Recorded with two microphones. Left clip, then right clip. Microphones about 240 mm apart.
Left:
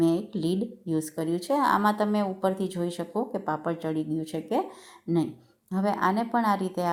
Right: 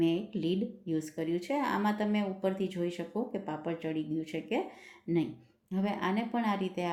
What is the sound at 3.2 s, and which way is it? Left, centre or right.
Speech, left.